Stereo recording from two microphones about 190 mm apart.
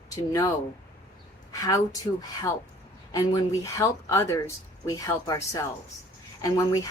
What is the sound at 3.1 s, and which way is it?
Speech, 15° left (ahead or behind).